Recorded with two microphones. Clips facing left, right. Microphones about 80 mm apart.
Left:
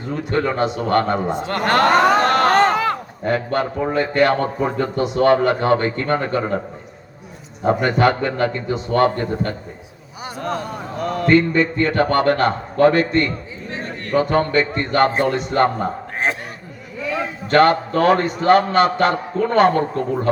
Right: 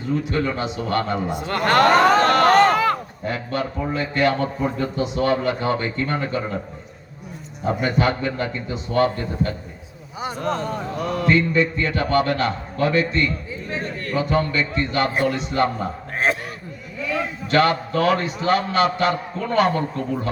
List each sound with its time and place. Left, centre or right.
0.1 s a man's voice: left
1.3 s a man's voice: left
2.2 s a sound: left
2.6 s a sound: centre
3.2 s a man's voice: left
7.6 s a man's voice: left
10.3 s speech: centre
11.0 s music: centre
11.3 s a man's voice: left
15.1 s a man's voice: left
15.4 s a man's voice: left
17.5 s a man's voice: left